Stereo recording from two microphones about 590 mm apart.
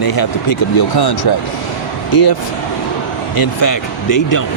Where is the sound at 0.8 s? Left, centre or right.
Left.